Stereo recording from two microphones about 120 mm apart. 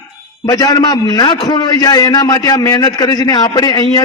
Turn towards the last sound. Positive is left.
turn(degrees=35)  # may be behind; listen again after turning